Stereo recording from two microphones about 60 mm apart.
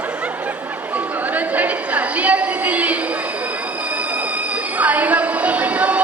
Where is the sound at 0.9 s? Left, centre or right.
Right.